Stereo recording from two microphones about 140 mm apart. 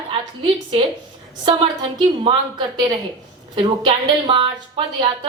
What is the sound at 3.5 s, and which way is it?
A woman's voice, 35° right (ahead or behind).